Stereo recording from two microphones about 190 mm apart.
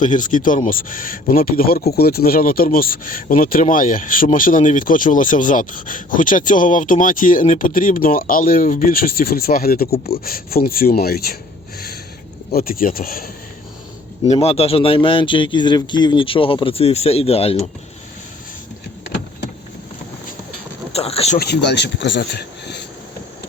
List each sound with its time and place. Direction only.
0.0 s speech: 40° left (ahead or behind)
12.5 s speech: 50° left (ahead or behind)
14.3 s a man's voice: 30° left (ahead or behind)
20.9 s speech: 30° left (ahead or behind)
21.3 s speech: 60° left (ahead or behind)